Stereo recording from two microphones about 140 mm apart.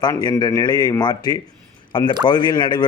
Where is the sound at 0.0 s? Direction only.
30° left (ahead or behind).